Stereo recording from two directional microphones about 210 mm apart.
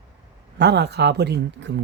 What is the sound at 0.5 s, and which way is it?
Speech, 50° right (ahead or behind).